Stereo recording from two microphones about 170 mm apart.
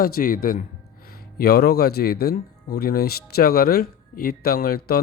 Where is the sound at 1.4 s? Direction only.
65° left (ahead or behind).